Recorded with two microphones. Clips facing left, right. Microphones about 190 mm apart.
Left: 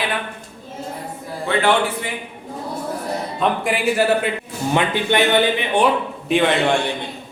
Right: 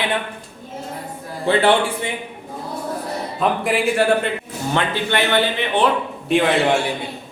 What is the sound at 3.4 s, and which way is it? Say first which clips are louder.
Speech: right 1 dB; centre (ahead or behind).